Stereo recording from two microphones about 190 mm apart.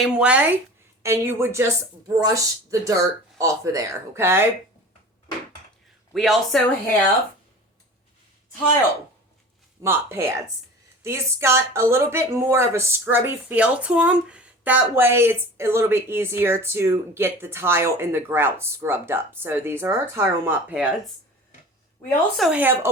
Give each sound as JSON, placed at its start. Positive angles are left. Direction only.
{"t": 0.0, "sound": "speech", "side_deg": -5}
{"t": 6.1, "sound": "speech", "side_deg": 0}
{"t": 9.8, "sound": "speech", "side_deg": -15}
{"t": 22.4, "sound": "speech", "side_deg": -10}